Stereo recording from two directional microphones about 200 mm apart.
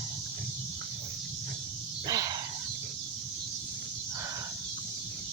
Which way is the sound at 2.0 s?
20° right (ahead or behind).